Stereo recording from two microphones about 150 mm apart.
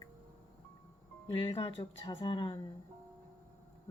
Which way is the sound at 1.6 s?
30° left (ahead or behind).